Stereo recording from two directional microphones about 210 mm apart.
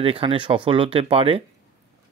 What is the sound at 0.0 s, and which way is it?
Speech, 25° right (ahead or behind).